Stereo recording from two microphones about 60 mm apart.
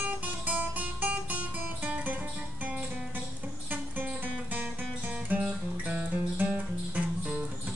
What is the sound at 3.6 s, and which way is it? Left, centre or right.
Music, right.